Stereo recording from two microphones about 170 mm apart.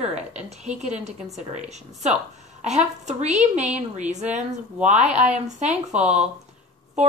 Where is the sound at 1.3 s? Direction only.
40° right (ahead or behind).